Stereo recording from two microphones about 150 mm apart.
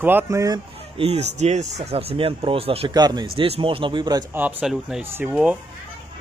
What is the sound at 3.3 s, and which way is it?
Speech, 40° right (ahead or behind).